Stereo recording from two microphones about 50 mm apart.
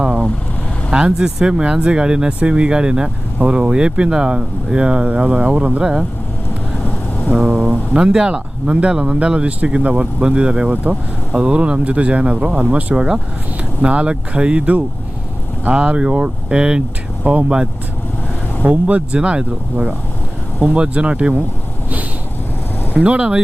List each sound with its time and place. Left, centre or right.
0.0 s vehicle: centre
0.9 s speech: centre
6.8 s vehicle: left
7.3 s speech: centre
10.8 s speech: right
11.4 s speech: right
17.2 s speech: right
18.6 s speech: right
23.0 s speech: right